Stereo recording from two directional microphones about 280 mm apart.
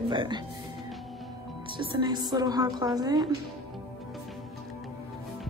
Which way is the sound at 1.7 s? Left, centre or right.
Centre.